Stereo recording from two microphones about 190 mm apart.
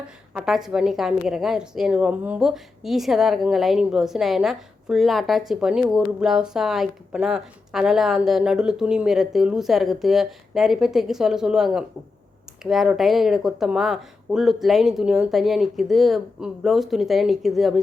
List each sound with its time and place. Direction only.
0.3 s speech: centre (ahead or behind)